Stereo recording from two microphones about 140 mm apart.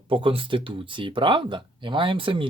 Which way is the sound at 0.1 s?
40° right (ahead or behind).